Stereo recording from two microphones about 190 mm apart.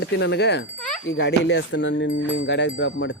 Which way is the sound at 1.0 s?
80° left.